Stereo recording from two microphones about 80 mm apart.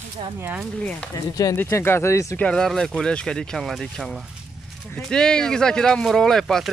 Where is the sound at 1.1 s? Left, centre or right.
Left.